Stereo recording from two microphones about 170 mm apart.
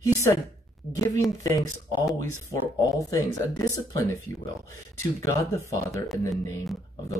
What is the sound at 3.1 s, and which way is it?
Speech, 20° left (ahead or behind).